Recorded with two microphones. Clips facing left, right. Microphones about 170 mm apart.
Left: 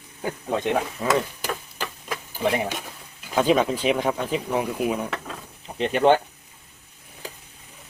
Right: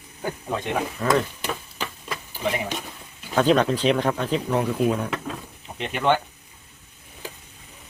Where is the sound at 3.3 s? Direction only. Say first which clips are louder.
Right 1 dB; 10° left (ahead or behind).